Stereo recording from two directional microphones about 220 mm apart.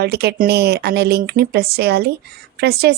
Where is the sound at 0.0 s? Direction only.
50° right (ahead or behind).